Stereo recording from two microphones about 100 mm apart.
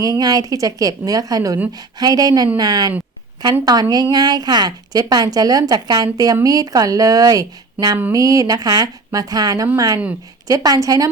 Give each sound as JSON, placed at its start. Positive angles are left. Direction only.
{"t": 0.0, "sound": "a woman's voice", "side_deg": -40}